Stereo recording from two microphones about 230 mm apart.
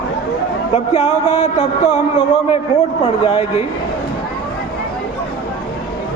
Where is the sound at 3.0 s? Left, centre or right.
Left.